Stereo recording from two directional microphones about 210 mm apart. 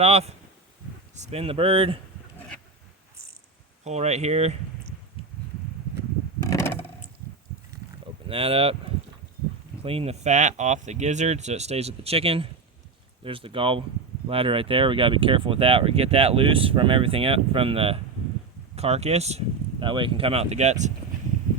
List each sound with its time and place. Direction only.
0.0 s speech: 30° right (ahead or behind)
3.8 s speech: 30° right (ahead or behind)
6.5 s a sound: 15° left (ahead or behind)
8.3 s speech: 25° right (ahead or behind)
9.8 s speech: 25° right (ahead or behind)